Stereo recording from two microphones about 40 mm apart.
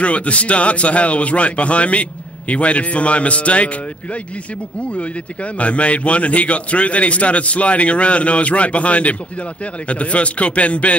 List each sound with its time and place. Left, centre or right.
0.0 s a man's voice: left